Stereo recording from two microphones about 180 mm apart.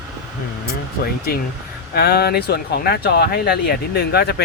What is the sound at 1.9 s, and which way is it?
Speech, 60° left (ahead or behind).